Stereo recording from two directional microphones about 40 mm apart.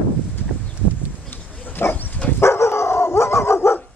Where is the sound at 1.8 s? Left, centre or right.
Left.